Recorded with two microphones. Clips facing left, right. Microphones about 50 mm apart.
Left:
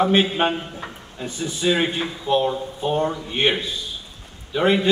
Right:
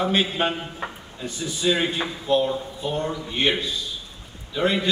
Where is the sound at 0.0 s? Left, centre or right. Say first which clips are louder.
Left 4 dB; left.